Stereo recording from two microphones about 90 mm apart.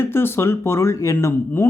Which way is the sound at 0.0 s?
25° left (ahead or behind).